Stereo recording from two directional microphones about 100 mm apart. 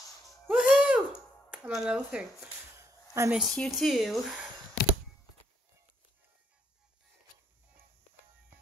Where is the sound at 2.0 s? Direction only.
15° right (ahead or behind).